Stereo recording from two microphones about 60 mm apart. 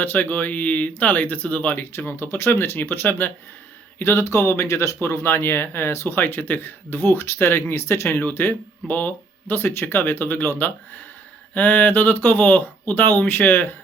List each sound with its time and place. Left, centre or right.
0.0 s speech: left
3.9 s speech: left
5.0 s speech: left
6.1 s speech: left